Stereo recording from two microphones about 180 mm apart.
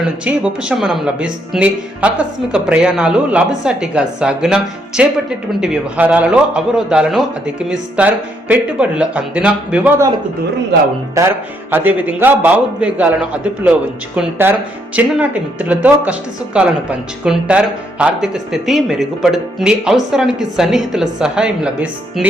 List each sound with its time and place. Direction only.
0.3 s speech: 5° right (ahead or behind)
11.2 s speech: 20° right (ahead or behind)